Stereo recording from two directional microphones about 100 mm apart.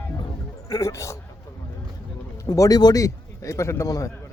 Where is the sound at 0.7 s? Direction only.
35° left (ahead or behind).